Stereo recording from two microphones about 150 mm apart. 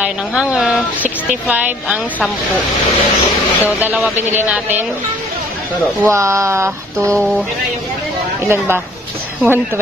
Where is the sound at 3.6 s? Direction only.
15° right (ahead or behind).